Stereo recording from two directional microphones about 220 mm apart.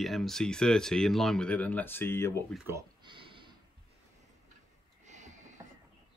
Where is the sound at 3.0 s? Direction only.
20° right (ahead or behind).